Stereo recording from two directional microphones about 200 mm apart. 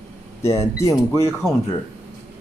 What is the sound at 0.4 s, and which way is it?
Speech, 15° left (ahead or behind).